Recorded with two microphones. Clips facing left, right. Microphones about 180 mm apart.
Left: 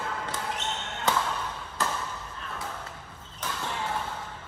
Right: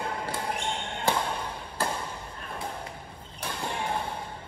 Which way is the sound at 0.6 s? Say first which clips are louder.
Right 2 dB; 10° right (ahead or behind).